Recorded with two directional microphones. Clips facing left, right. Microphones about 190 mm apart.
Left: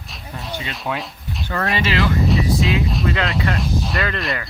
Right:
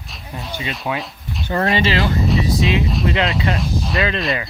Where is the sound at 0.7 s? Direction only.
Centre (ahead or behind).